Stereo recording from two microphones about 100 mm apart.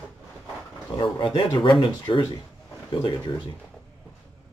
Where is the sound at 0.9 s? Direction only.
50° left (ahead or behind).